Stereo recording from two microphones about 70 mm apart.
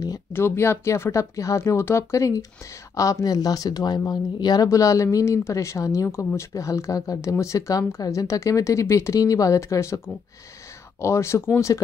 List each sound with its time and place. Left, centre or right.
0.3 s speech: left
4.6 s speech: left